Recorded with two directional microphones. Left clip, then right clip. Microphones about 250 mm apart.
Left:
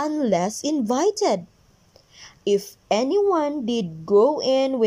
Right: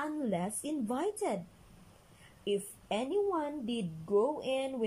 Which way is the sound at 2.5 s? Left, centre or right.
Left.